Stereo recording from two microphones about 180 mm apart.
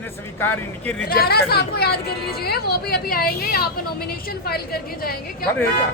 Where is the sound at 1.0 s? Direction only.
60° left (ahead or behind).